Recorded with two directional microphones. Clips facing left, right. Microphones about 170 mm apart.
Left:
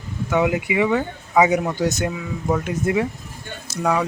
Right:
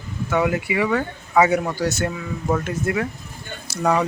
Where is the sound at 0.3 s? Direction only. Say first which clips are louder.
Left 1 dB; 15° left (ahead or behind).